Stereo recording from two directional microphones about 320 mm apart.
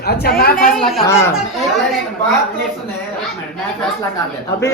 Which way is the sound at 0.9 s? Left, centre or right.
Centre.